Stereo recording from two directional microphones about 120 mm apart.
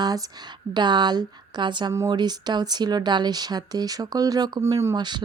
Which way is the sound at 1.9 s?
30° right (ahead or behind).